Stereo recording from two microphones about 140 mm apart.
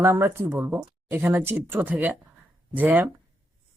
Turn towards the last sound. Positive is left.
turn(degrees=-10)  # may be behind; listen again after turning